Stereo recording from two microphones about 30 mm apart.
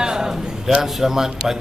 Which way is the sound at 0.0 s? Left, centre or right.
Right.